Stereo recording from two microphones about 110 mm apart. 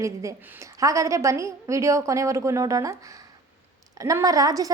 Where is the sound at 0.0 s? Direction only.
30° right (ahead or behind).